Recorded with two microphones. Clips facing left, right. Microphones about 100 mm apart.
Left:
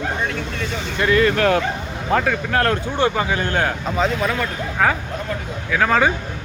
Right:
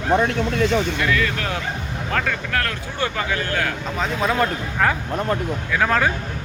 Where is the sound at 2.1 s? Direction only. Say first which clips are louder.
Left 5 dB; 20° left (ahead or behind).